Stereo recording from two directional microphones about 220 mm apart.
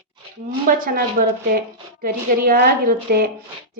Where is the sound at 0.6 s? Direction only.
40° right (ahead or behind).